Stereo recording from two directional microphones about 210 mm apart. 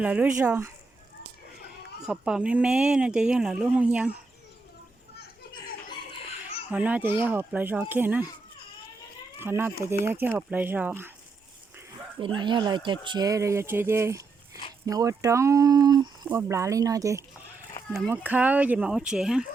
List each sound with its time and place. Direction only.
0.0 s speech: 5° right (ahead or behind)
2.0 s speech: 5° right (ahead or behind)
5.1 s children playing: 50° left (ahead or behind)
6.7 s speech: 5° right (ahead or behind)
9.4 s speech: 10° right (ahead or behind)
12.2 s speech: 25° right (ahead or behind); by 19.5 s 5° right (ahead or behind)